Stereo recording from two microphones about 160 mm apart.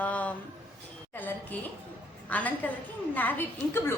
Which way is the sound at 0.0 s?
10° left (ahead or behind).